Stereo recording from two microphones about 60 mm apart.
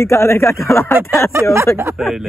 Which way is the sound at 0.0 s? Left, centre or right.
Left.